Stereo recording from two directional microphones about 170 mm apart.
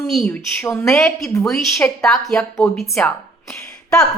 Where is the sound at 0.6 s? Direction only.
10° left (ahead or behind).